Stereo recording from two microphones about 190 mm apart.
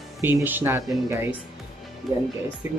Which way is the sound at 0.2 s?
10° right (ahead or behind).